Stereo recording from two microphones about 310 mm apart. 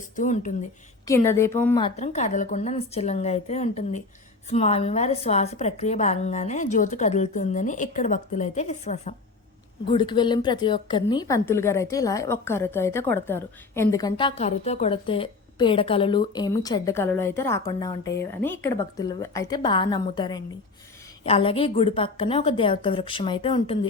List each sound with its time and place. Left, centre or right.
0.2 s a woman's voice: left
1.0 s a woman's voice: centre
2.0 s a woman's voice: left